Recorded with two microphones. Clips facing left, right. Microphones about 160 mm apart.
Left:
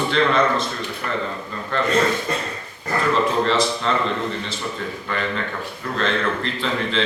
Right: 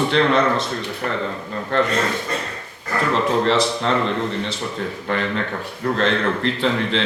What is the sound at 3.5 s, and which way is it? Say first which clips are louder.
Speech: right 2 dB; 70° right (ahead or behind).